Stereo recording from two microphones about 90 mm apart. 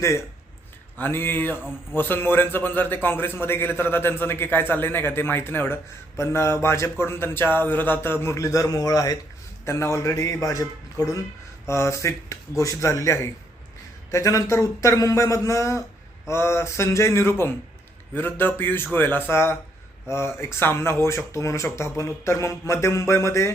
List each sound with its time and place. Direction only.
0.0 s speech: 35° left (ahead or behind)
0.9 s a man's voice: 25° left (ahead or behind); by 9.1 s 40° left (ahead or behind)
9.6 s a man's voice: 30° left (ahead or behind)